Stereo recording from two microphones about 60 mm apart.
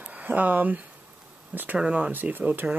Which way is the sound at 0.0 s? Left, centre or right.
Right.